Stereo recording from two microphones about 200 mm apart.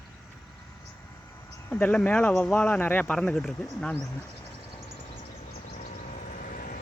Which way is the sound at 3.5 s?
15° left (ahead or behind).